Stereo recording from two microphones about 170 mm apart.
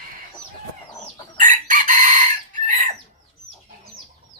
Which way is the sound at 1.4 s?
50° right (ahead or behind).